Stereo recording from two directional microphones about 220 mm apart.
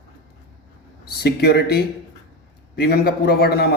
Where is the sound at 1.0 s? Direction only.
45° left (ahead or behind).